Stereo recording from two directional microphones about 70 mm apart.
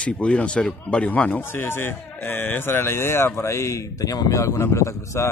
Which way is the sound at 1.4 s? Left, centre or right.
Left.